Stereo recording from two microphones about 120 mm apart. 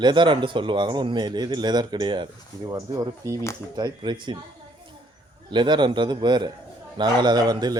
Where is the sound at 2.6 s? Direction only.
30° right (ahead or behind).